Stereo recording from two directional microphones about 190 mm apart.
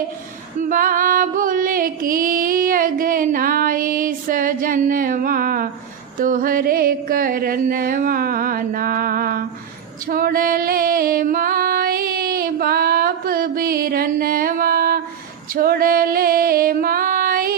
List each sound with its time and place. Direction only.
0.6 s music: 45° right (ahead or behind)
10.1 s female singing: 50° right (ahead or behind)
15.5 s music: 50° right (ahead or behind)